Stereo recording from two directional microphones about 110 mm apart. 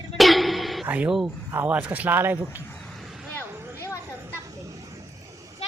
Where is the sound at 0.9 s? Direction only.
15° right (ahead or behind).